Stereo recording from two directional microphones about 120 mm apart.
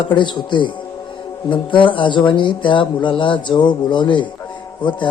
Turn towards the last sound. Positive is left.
turn(degrees=40)  # may be behind; listen again after turning